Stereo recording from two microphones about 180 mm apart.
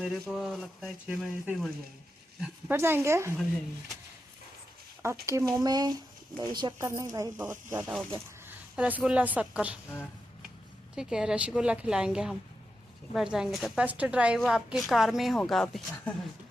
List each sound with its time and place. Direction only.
0.0 s a woman's voice: centre (ahead or behind)
5.2 s a woman's voice: 15° right (ahead or behind)
10.9 s a woman's voice: 5° right (ahead or behind)